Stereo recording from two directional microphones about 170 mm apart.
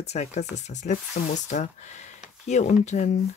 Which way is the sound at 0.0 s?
40° left (ahead or behind).